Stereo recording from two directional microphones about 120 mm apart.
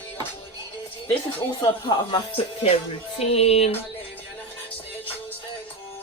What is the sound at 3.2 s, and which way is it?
Music, 55° left (ahead or behind).